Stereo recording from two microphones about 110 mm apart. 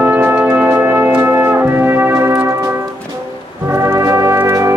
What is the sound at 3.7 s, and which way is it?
Brass instrument, 25° right (ahead or behind).